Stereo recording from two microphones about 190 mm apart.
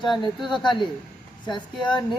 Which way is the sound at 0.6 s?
25° left (ahead or behind).